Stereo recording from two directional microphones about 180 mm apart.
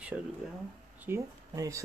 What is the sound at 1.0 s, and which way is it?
Speech, 15° right (ahead or behind).